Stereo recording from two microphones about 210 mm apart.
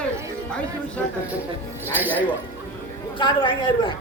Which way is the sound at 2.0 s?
5° left (ahead or behind).